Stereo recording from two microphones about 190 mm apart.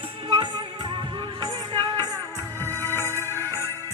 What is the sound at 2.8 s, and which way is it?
Music, 10° left (ahead or behind).